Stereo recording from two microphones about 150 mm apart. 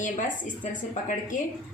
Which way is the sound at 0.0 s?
60° left (ahead or behind).